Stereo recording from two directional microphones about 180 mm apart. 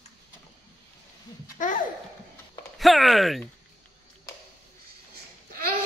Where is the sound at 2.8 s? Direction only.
Centre (ahead or behind).